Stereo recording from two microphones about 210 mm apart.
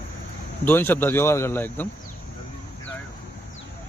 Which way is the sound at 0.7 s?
10° left (ahead or behind).